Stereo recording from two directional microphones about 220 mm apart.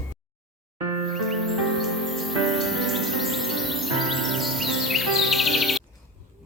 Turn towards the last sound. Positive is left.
turn(degrees=0)  # may be behind; listen again after turning